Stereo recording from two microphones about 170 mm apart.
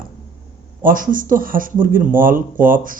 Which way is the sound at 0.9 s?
50° right (ahead or behind).